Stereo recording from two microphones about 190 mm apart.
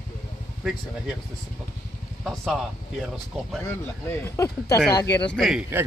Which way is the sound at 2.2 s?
Centre (ahead or behind).